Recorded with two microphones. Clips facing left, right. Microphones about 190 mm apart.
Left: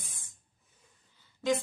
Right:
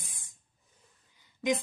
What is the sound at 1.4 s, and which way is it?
Speech, 15° right (ahead or behind).